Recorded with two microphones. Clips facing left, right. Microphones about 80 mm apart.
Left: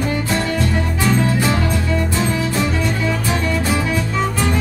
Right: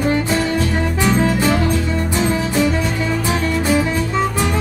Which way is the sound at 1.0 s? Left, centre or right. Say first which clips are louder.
Right 1 dB; centre.